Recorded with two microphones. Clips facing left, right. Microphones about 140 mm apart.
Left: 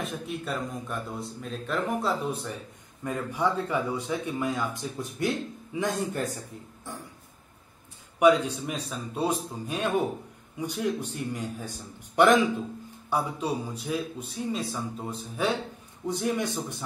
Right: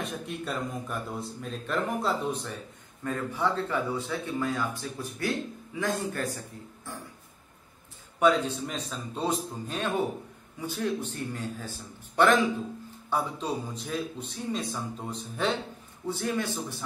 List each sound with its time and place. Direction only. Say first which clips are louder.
0.0 s a man's voice: left 1 dB; centre (ahead or behind)
3.0 s a man's voice: left 1 dB; 15° left (ahead or behind)
8.2 s a man's voice: left 3 dB; 10° left (ahead or behind)
16.1 s speech: left 2 dB; 20° left (ahead or behind)